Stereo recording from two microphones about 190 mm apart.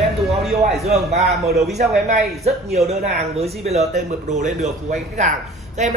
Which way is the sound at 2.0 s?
35° right (ahead or behind).